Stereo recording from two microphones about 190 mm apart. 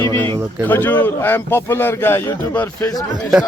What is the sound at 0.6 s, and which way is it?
A man's voice, 10° left (ahead or behind).